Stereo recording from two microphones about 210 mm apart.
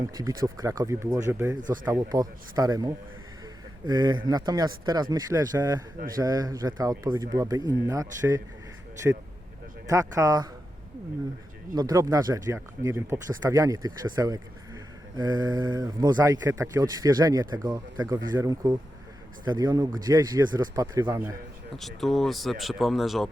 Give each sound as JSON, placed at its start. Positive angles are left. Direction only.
{"t": 0.1, "sound": "speech", "side_deg": -15}
{"t": 9.8, "sound": "speech", "side_deg": -15}
{"t": 11.7, "sound": "speech", "side_deg": -20}
{"t": 21.8, "sound": "speech", "side_deg": 0}